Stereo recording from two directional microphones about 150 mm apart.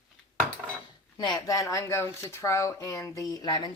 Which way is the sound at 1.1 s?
25° left (ahead or behind).